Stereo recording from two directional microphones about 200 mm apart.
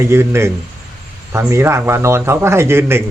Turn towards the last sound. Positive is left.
turn(degrees=-10)  # may be behind; listen again after turning